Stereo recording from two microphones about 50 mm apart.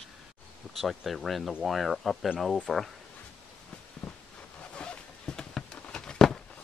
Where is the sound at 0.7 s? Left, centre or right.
Centre.